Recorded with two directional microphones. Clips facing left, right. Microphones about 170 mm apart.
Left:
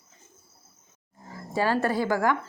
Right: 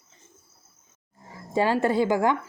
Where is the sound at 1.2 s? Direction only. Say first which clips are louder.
Right 2 dB; 20° right (ahead or behind).